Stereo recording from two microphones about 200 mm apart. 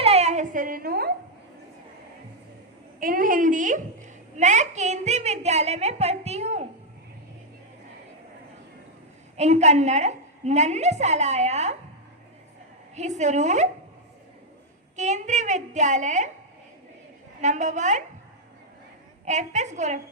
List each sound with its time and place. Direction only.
0.0 s a sound: 30° right (ahead or behind); by 1.1 s 50° right (ahead or behind)
3.0 s a woman's voice: 45° right (ahead or behind)
9.4 s a woman's voice: 35° right (ahead or behind)
13.0 s a woman's voice: 35° right (ahead or behind)
14.9 s a woman's voice: 35° right (ahead or behind)
17.4 s a woman's voice: 35° right (ahead or behind)
19.2 s a woman's voice: 35° right (ahead or behind)